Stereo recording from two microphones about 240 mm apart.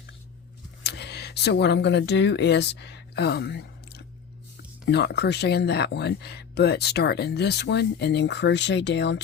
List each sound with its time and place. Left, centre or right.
0.9 s speech: left